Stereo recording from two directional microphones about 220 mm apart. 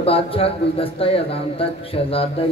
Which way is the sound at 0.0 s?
25° left (ahead or behind).